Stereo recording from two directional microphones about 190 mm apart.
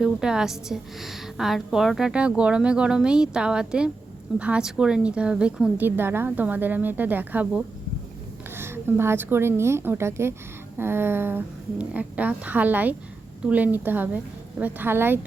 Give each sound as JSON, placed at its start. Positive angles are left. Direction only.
{"t": 0.0, "sound": "a woman's voice", "side_deg": -5}